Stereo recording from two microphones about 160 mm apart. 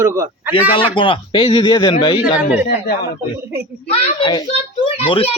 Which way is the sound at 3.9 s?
30° left (ahead or behind).